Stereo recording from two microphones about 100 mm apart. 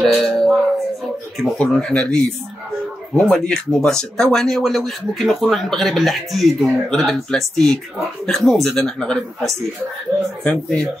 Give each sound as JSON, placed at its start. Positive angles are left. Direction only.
{"t": 0.0, "sound": "music", "side_deg": 5}
{"t": 1.4, "sound": "speech", "side_deg": 5}